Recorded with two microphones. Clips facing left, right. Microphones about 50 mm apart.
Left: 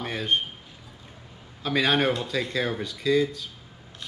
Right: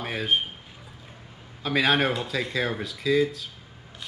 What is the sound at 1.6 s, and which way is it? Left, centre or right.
Speech, centre.